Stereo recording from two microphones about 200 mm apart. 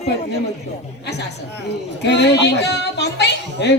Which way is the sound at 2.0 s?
60° left (ahead or behind).